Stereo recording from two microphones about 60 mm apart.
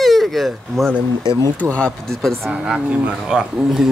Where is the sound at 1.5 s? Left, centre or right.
Left.